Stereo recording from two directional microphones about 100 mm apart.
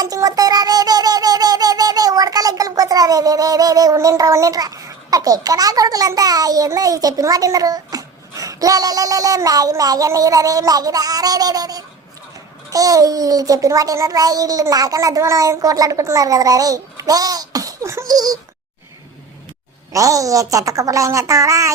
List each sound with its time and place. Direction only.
0.0 s a sound: 40° right (ahead or behind)
12.7 s a child's voice: 35° right (ahead or behind)
19.9 s a child's voice: 35° right (ahead or behind)